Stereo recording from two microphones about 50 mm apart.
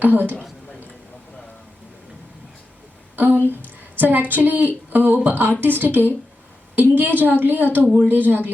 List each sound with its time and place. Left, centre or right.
0.0 s a woman's voice: right
3.2 s a sound: right
3.6 s a woman's voice: right